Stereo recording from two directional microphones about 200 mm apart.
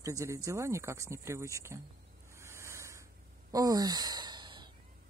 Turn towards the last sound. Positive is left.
turn(degrees=-25)  # may be behind; listen again after turning